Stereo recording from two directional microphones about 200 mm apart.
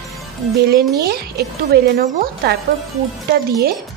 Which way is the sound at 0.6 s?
50° right (ahead or behind).